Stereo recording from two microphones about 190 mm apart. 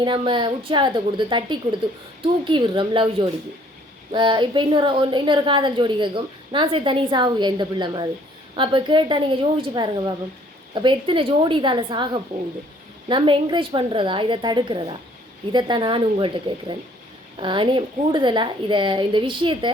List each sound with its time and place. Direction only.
0.0 s a woman's voice: 25° right (ahead or behind)